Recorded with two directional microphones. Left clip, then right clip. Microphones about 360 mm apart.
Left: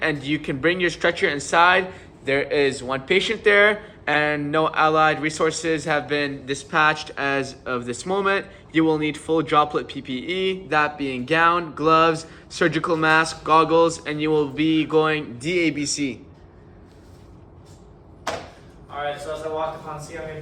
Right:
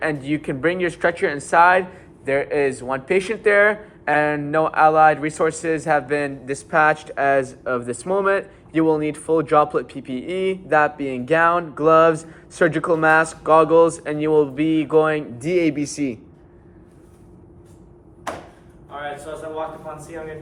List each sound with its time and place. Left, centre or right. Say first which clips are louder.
0.0 s speech: even; centre
15.8 s a man's voice: right 1 dB; right